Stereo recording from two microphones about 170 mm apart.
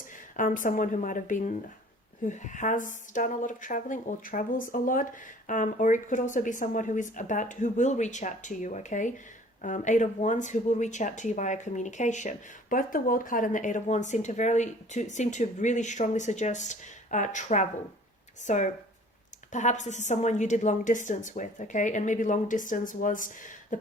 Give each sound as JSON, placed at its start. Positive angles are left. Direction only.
{"t": 0.3, "sound": "speech", "side_deg": 50}